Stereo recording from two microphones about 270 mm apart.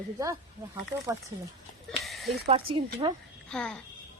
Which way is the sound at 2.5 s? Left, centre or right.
Centre.